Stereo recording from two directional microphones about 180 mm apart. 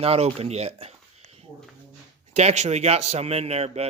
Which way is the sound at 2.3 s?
40° right (ahead or behind).